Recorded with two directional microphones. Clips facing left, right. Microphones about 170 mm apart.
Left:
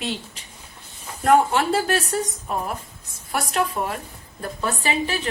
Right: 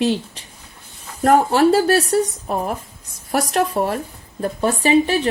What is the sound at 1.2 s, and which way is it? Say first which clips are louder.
Speech: right 4 dB; 40° right (ahead or behind).